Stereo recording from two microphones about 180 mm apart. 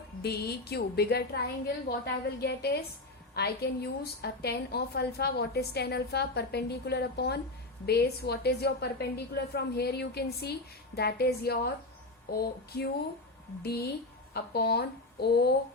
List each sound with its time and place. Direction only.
0.2 s a woman's voice: 60° left (ahead or behind)